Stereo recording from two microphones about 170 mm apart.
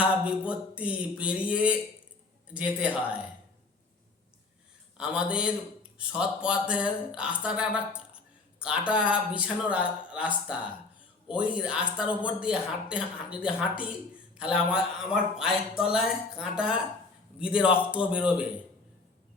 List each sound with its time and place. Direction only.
0.3 s speech: 5° right (ahead or behind)
4.9 s speech: 5° right (ahead or behind)